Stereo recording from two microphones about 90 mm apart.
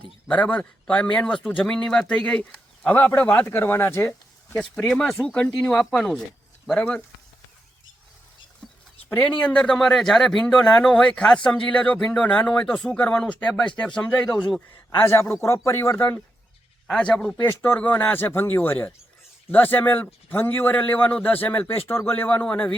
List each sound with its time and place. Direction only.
0.3 s speech: 15° left (ahead or behind)
4.8 s speech: 5° left (ahead or behind)
8.6 s a sound: 5° left (ahead or behind)
9.4 s speech: 10° left (ahead or behind)
15.0 s speech: 30° left (ahead or behind)
16.0 s a man's voice: 20° left (ahead or behind)